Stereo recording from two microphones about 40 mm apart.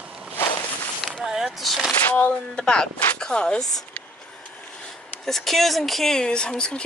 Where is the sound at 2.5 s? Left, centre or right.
Centre.